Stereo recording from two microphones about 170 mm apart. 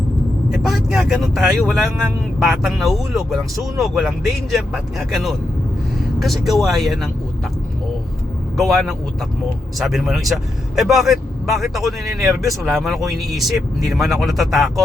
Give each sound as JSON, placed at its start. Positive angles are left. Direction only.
{"t": 0.5, "sound": "speech", "side_deg": 0}
{"t": 8.5, "sound": "speech", "side_deg": 0}